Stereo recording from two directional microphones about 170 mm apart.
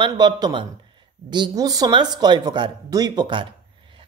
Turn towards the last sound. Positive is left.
turn(degrees=-25)  # may be behind; listen again after turning